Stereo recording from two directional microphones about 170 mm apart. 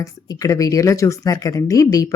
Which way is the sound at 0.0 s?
20° left (ahead or behind).